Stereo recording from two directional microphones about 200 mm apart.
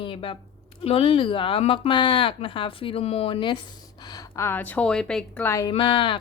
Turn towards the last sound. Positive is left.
turn(degrees=25)  # may be behind; listen again after turning